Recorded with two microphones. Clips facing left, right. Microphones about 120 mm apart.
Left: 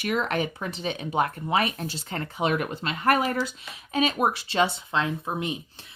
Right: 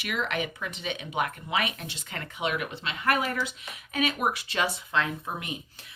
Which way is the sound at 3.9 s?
30° left (ahead or behind).